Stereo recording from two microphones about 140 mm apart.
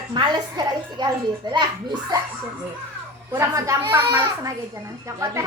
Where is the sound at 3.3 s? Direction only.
20° right (ahead or behind).